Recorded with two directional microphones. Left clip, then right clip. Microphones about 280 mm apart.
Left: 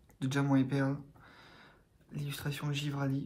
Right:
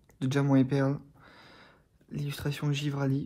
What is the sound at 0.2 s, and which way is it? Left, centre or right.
Speech, right.